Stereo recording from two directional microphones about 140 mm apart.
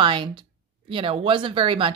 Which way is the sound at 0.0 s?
35° right (ahead or behind).